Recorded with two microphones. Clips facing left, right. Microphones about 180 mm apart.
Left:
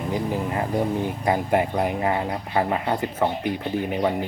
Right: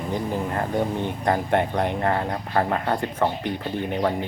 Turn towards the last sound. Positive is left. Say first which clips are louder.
# left 1 dB
turn(degrees=5)  # may be behind; listen again after turning